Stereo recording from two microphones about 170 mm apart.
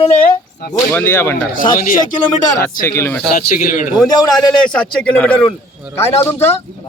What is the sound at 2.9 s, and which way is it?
Speech, 15° left (ahead or behind).